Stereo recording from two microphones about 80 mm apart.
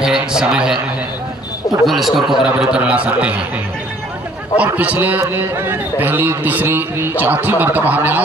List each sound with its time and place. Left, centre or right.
0.0 s a man's voice: centre
1.9 s a man's voice: centre
4.7 s a man's voice: right